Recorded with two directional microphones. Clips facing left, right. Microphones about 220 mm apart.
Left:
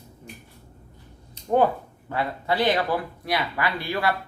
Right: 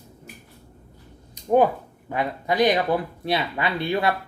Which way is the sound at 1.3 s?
15° right (ahead or behind).